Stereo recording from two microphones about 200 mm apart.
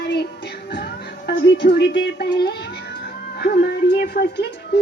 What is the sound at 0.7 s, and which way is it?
Music, 55° left (ahead or behind).